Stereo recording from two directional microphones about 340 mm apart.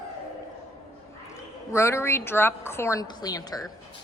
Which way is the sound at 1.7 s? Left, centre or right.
Centre.